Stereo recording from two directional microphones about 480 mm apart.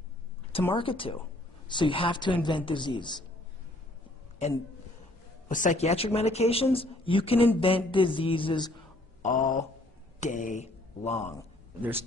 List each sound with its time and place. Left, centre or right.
0.5 s a man's voice: centre
4.4 s a man's voice: centre